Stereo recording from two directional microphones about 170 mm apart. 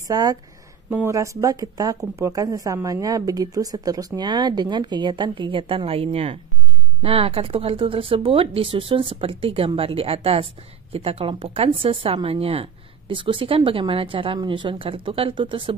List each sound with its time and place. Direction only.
0.1 s speech: 20° right (ahead or behind)